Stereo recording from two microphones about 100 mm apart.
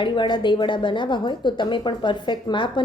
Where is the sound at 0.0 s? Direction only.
50° left (ahead or behind).